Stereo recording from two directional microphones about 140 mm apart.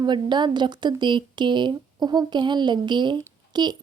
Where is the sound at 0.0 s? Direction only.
30° right (ahead or behind).